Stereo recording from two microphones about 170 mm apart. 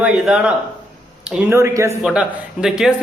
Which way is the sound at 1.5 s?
15° right (ahead or behind).